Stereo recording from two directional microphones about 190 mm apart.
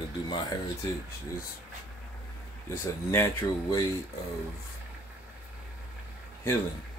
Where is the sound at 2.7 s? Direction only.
15° left (ahead or behind).